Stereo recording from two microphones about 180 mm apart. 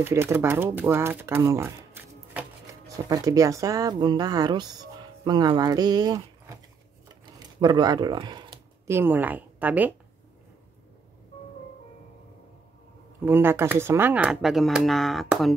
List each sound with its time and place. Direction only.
0.0 s speech: 15° right (ahead or behind)
13.2 s speech: 10° right (ahead or behind)